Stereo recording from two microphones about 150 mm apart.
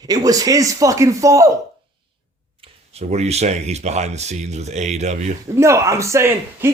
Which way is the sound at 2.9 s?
45° right (ahead or behind).